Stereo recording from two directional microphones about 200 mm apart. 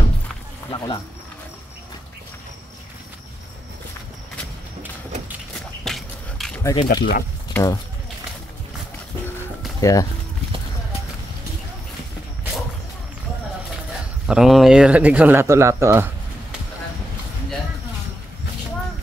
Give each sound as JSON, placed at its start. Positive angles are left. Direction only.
{"t": 0.7, "sound": "speech", "side_deg": 25}
{"t": 5.9, "sound": "a sound", "side_deg": 0}
{"t": 6.6, "sound": "speech", "side_deg": 20}
{"t": 6.9, "sound": "speech", "side_deg": 50}
{"t": 7.5, "sound": "speech", "side_deg": 15}
{"t": 9.8, "sound": "speech", "side_deg": 15}
{"t": 14.2, "sound": "speech", "side_deg": -5}